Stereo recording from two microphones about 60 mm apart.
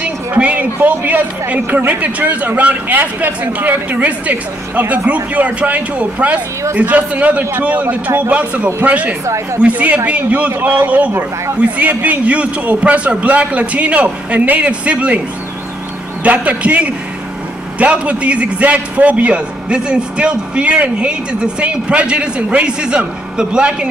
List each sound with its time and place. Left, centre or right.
0.4 s speech: right
9.2 s speech: right
9.6 s speech: right
16.2 s a man's voice: right